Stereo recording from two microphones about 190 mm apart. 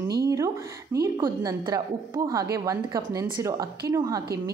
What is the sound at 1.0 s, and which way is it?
A woman's voice, 20° right (ahead or behind).